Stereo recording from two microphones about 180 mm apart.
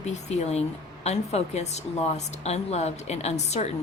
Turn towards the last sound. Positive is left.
turn(degrees=40)  # may be behind; listen again after turning